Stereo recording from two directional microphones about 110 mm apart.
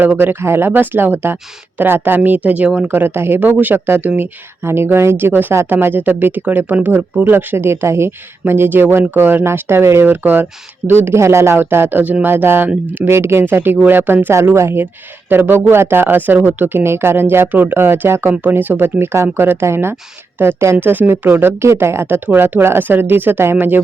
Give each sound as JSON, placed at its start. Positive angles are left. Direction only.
{"t": 0.0, "sound": "speech", "side_deg": -15}